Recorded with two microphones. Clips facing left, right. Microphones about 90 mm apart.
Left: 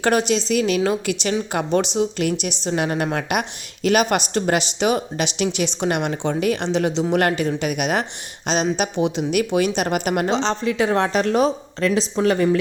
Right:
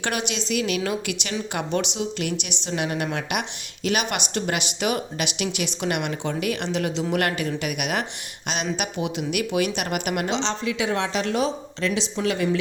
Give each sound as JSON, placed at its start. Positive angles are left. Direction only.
{"t": 0.0, "sound": "speech", "side_deg": 35}